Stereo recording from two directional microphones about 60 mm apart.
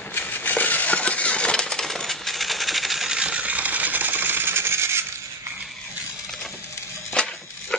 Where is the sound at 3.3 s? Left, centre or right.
Right.